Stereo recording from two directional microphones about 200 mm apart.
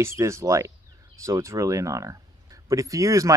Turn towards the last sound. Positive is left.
turn(degrees=-15)  # may be behind; listen again after turning